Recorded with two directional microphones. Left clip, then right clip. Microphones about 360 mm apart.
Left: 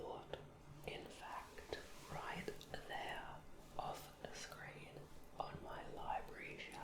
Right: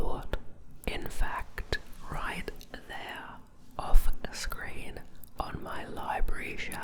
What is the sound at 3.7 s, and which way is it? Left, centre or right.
Whispering, right.